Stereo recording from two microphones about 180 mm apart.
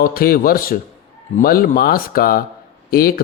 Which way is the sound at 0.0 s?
55° left (ahead or behind).